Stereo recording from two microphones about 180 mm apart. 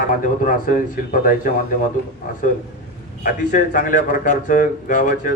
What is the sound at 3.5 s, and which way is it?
A man's voice, 45° left (ahead or behind).